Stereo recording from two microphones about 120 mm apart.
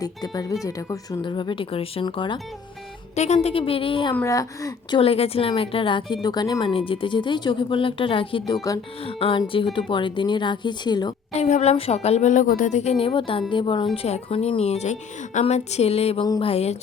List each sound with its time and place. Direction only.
0.0 s a woman's voice: 30° left (ahead or behind)
1.2 s speech: 40° left (ahead or behind)
3.2 s speech: 65° left (ahead or behind); by 4.1 s 50° left (ahead or behind)
4.3 s a woman's voice: 30° left (ahead or behind)
4.9 s speech: 55° left (ahead or behind); by 11.1 s 35° left (ahead or behind)
11.3 s speech: 70° left (ahead or behind)